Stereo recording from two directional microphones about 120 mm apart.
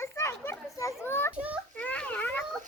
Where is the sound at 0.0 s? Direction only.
20° left (ahead or behind).